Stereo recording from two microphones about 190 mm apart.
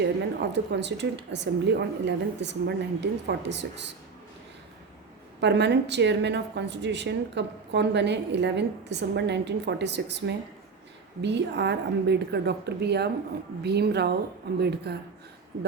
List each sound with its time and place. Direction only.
0.5 s a woman's voice: 65° right (ahead or behind)
5.4 s a woman's voice: 65° right (ahead or behind)